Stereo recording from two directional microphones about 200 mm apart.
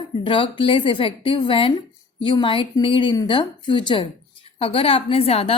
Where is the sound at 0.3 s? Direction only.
25° left (ahead or behind).